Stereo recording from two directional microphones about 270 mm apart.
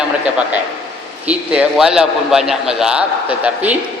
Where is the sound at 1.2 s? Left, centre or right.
Centre.